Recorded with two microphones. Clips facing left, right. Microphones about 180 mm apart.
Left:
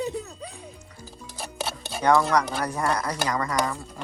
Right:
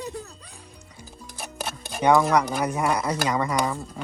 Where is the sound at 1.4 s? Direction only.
15° right (ahead or behind).